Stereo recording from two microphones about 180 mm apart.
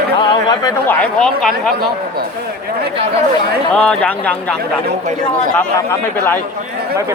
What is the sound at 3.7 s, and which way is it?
Speech, 5° left (ahead or behind).